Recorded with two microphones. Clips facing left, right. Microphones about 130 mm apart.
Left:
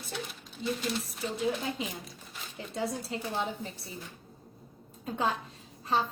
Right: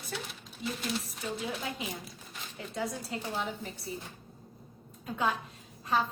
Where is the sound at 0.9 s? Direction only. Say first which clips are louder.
Left 1 dB; centre (ahead or behind).